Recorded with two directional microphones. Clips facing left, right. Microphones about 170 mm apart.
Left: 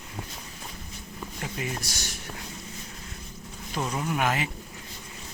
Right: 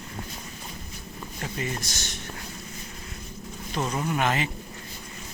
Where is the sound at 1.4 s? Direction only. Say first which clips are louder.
Right 2 dB; 5° left (ahead or behind).